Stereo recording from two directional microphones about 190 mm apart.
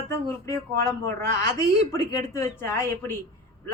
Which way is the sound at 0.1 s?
15° left (ahead or behind).